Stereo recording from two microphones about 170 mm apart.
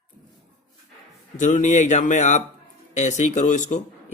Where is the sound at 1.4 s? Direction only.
45° left (ahead or behind).